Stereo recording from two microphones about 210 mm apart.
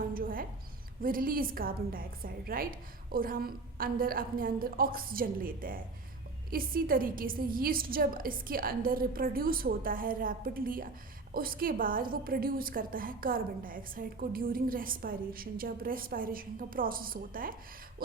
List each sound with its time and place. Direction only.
0.1 s a woman's voice: 40° right (ahead or behind)